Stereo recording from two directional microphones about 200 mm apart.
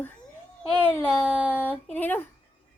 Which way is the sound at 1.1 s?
5° right (ahead or behind).